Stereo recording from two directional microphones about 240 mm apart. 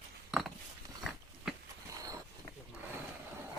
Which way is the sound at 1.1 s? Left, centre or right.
Centre.